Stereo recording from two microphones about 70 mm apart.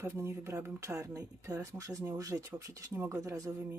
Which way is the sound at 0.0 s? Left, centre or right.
Right.